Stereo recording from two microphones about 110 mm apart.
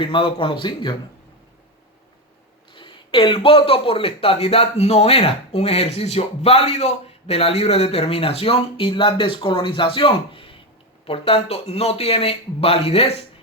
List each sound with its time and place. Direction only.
0.0 s a man's voice: 50° left (ahead or behind)
2.7 s speech: 50° left (ahead or behind)